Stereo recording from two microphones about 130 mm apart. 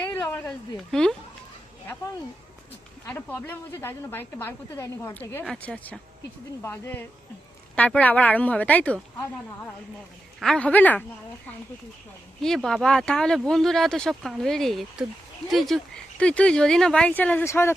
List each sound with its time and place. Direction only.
0.0 s a sound: 15° left (ahead or behind)
0.9 s speech: 5° left (ahead or behind)
3.1 s speech: 15° left (ahead or behind)
10.4 s speech: 5° left (ahead or behind)
12.4 s speech: 5° left (ahead or behind); by 17.7 s 20° left (ahead or behind)